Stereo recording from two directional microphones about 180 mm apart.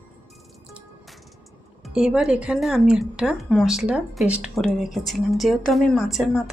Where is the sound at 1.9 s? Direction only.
5° right (ahead or behind).